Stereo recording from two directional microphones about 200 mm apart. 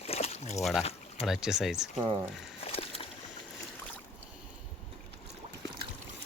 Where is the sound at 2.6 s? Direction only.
30° left (ahead or behind).